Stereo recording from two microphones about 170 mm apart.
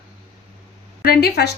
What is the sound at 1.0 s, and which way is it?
Speech, 65° left (ahead or behind).